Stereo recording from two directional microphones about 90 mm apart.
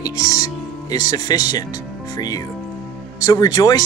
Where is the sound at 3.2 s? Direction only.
45° left (ahead or behind).